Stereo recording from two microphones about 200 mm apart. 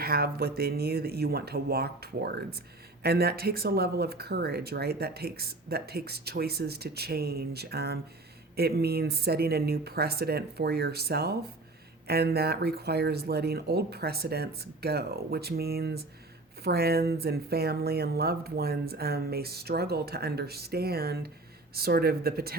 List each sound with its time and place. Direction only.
0.0 s speech: 50° right (ahead or behind)